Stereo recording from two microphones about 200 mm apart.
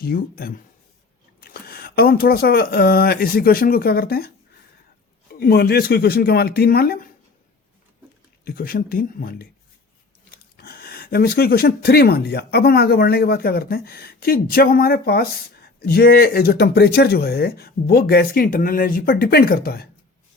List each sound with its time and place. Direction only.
0.0 s speech: 50° left (ahead or behind)
5.3 s speech: 50° left (ahead or behind)
8.4 s speech: 45° left (ahead or behind)